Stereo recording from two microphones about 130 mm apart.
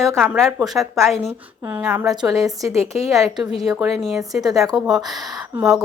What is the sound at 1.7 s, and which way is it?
Speech, 15° right (ahead or behind).